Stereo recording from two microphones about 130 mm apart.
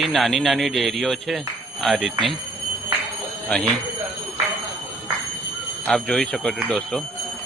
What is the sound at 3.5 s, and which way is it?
Speech, 5° left (ahead or behind).